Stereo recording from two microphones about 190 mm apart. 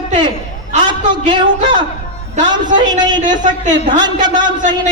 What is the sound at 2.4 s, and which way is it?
Speech, 40° right (ahead or behind).